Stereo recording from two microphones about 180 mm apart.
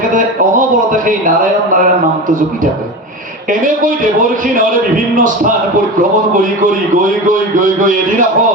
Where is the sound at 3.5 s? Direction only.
50° right (ahead or behind).